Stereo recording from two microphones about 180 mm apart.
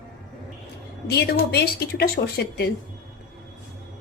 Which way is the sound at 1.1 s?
60° left (ahead or behind).